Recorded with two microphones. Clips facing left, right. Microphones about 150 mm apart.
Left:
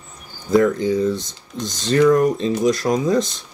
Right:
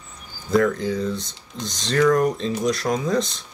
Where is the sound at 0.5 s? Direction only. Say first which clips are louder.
Left 4 dB; centre (ahead or behind).